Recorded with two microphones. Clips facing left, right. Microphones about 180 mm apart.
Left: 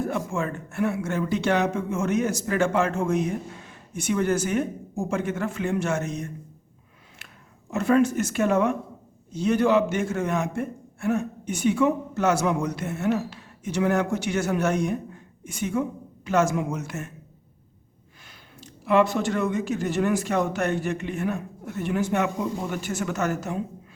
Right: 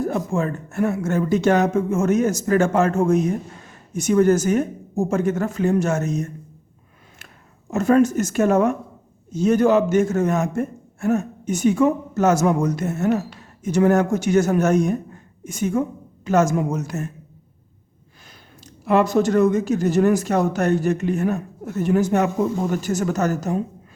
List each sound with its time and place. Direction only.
0.3 s a man's voice: 40° right (ahead or behind)
7.7 s a man's voice: 45° right (ahead or behind)
18.6 s speech: 40° right (ahead or behind)